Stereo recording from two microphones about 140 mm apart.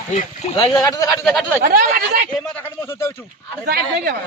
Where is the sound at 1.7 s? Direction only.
80° right.